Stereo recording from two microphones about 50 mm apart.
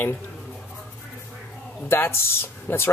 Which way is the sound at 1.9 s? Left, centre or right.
Left.